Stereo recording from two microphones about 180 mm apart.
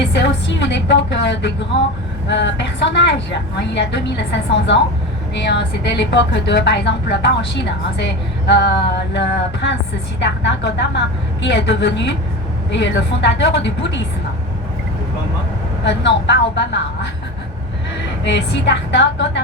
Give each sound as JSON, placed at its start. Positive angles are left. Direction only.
{"t": 0.0, "sound": "a woman's voice", "side_deg": 75}
{"t": 15.8, "sound": "a woman's voice", "side_deg": 75}
{"t": 18.3, "sound": "a woman's voice", "side_deg": 75}